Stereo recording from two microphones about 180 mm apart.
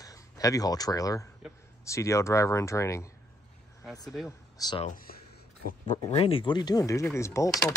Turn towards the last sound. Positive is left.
turn(degrees=15)  # may be behind; listen again after turning